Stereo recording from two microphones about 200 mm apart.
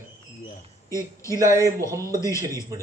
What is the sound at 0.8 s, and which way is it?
A man's voice, 15° left (ahead or behind).